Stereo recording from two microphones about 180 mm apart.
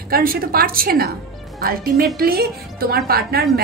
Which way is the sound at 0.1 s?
55° right (ahead or behind).